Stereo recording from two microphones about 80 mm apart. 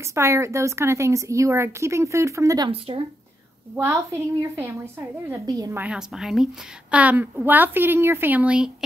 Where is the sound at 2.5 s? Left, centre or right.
Right.